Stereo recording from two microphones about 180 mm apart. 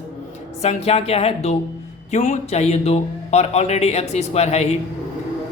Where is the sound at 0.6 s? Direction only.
35° left (ahead or behind).